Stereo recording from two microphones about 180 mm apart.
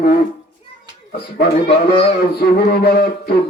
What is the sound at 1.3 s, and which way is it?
Saxophone, 55° left (ahead or behind).